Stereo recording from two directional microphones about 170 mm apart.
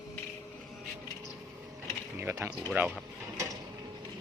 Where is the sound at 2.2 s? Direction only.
15° right (ahead or behind).